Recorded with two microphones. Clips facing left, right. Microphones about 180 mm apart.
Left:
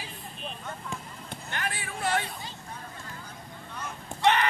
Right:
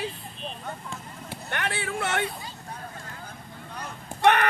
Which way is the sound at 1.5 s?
70° right (ahead or behind).